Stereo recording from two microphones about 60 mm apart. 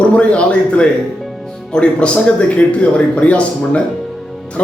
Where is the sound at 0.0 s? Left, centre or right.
Centre.